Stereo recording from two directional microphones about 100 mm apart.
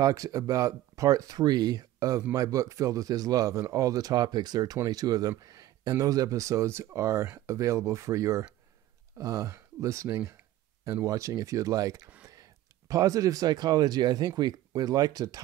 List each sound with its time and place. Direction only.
0.0 s speech: 35° right (ahead or behind)